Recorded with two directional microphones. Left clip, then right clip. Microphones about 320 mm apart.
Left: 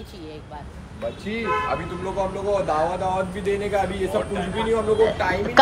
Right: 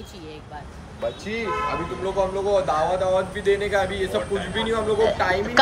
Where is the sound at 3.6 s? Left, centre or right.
Centre.